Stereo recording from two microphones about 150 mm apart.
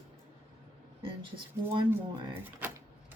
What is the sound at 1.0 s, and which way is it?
Speech, 35° right (ahead or behind).